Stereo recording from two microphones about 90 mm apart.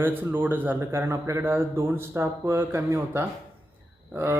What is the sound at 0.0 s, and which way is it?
Speech, 20° right (ahead or behind).